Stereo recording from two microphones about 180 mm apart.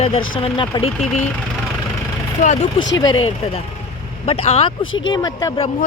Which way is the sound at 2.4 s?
40° left (ahead or behind).